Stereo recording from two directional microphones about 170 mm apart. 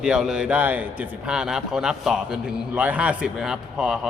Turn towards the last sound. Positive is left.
turn(degrees=0)  # may be behind; listen again after turning